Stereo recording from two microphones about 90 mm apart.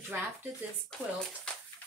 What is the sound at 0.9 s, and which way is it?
Speech, 10° left (ahead or behind).